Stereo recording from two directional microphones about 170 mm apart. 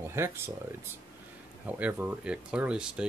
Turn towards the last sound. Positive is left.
turn(degrees=-5)  # may be behind; listen again after turning